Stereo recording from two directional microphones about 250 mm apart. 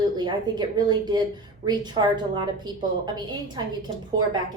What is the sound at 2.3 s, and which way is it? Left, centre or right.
A woman's voice, centre.